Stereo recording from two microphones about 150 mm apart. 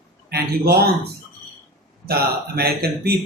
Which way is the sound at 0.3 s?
90° right.